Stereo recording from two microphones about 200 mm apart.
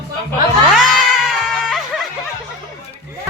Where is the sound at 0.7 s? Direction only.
5° right (ahead or behind).